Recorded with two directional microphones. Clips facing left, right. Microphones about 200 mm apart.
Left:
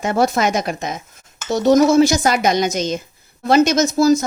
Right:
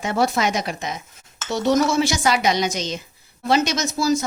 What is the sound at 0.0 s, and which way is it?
Speech, 45° left (ahead or behind).